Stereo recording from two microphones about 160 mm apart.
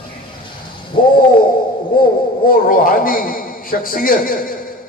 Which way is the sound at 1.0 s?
30° left (ahead or behind).